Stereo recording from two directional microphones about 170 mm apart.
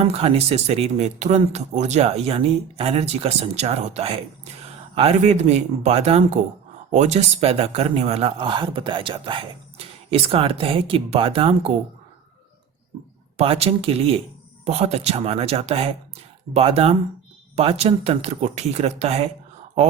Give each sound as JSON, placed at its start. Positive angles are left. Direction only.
{"t": 0.0, "sound": "speech", "side_deg": -35}
{"t": 13.3, "sound": "speech", "side_deg": -35}